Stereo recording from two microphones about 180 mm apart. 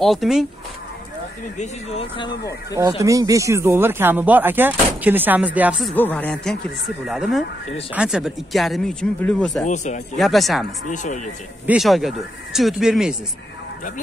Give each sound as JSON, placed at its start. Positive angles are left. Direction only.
{"t": 0.0, "sound": "speech", "side_deg": 0}
{"t": 1.6, "sound": "speech", "side_deg": 35}
{"t": 3.0, "sound": "speech", "side_deg": -20}
{"t": 5.9, "sound": "a woman's voice", "side_deg": 10}
{"t": 9.7, "sound": "speech", "side_deg": 40}
{"t": 10.1, "sound": "speech", "side_deg": 0}
{"t": 10.9, "sound": "speech", "side_deg": 45}
{"t": 11.6, "sound": "speech", "side_deg": -5}